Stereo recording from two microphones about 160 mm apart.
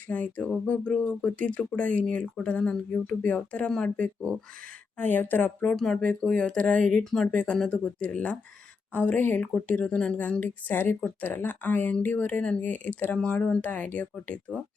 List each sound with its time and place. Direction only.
0.1 s a woman's voice: 10° left (ahead or behind)